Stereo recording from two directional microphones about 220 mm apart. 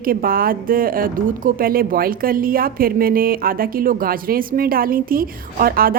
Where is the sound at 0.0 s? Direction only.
40° right (ahead or behind).